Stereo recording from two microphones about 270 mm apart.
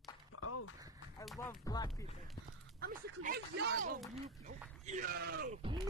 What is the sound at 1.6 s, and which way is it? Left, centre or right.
Speech, centre.